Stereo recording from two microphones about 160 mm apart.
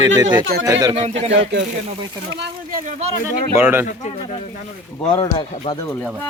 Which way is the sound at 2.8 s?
45° right (ahead or behind).